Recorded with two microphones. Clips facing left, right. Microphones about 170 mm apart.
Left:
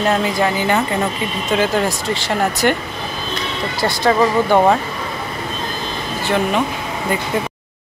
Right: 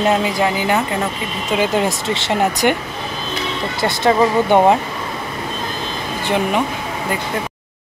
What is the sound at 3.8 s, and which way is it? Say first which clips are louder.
Speech: even; 20° right (ahead or behind).